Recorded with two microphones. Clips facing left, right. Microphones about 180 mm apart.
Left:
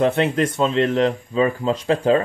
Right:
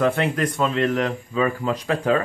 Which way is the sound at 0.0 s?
25° left (ahead or behind).